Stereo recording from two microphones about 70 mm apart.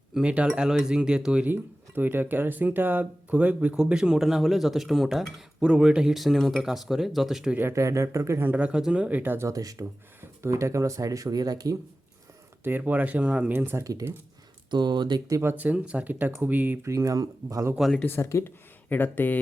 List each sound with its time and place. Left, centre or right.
0.1 s speech: centre
2.0 s speech: right; by 5.3 s centre
5.5 s speech: centre
7.7 s speech: right
8.4 s speech: centre
9.5 s speech: right
10.2 s speech: right
12.6 s speech: right
13.5 s speech: right
14.7 s speech: right
15.5 s speech: right
16.8 s speech: right
18.0 s speech: left
18.9 s speech: left